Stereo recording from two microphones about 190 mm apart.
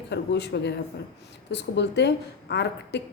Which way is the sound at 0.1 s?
65° left (ahead or behind).